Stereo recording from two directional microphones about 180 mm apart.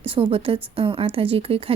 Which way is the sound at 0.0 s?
30° right (ahead or behind).